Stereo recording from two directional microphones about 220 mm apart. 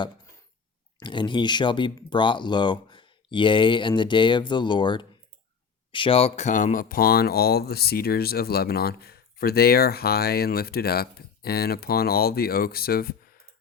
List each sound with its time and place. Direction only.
0.9 s speech: 20° left (ahead or behind); by 13.1 s 45° left (ahead or behind)